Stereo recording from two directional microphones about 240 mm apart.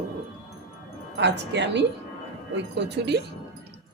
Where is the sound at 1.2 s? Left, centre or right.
Right.